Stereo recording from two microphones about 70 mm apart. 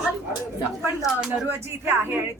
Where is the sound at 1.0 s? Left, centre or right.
Centre.